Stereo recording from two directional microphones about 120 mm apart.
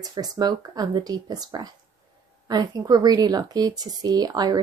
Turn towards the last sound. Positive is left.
turn(degrees=-35)  # may be behind; listen again after turning